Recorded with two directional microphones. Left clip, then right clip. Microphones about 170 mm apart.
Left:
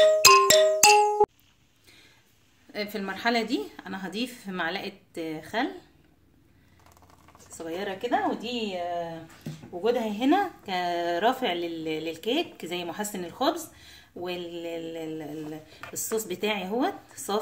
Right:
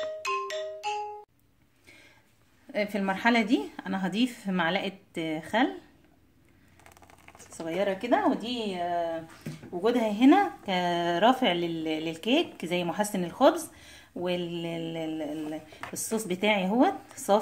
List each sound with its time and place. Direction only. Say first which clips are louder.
0.0 s music: left 15 dB; 80° left
2.7 s a woman's voice: right 4 dB; 45° right (ahead or behind)
7.5 s speech: right 4 dB; 40° right (ahead or behind)
9.8 s speech: right 1 dB; 35° right (ahead or behind)